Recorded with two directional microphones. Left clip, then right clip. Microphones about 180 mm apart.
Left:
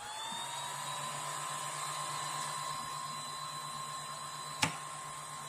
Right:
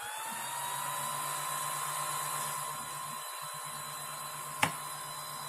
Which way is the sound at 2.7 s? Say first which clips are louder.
Even; 25° right (ahead or behind).